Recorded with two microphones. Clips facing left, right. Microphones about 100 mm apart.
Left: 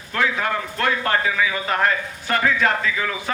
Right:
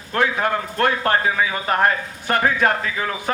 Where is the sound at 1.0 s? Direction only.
30° right (ahead or behind).